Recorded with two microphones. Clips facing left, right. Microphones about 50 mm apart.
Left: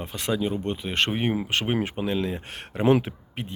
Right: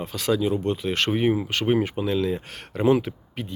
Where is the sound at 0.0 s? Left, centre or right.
Left.